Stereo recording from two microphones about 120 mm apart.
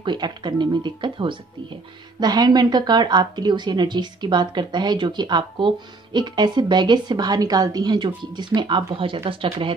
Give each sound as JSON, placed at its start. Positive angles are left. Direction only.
{"t": 0.0, "sound": "a woman's voice", "side_deg": -35}